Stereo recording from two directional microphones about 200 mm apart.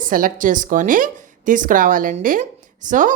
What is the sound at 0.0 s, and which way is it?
A woman's voice, 45° right (ahead or behind).